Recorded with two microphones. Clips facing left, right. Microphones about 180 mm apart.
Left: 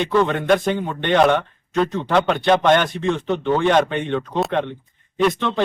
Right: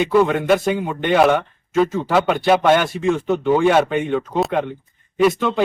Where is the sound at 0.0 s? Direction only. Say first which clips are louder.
Right 3 dB; 5° right (ahead or behind).